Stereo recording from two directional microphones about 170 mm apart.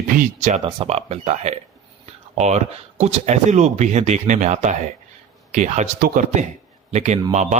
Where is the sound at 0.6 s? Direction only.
35° right (ahead or behind).